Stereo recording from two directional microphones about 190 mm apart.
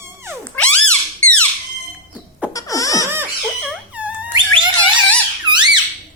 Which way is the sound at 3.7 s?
10° right (ahead or behind).